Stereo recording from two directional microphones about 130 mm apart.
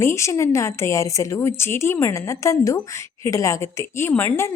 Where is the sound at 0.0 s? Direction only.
20° left (ahead or behind).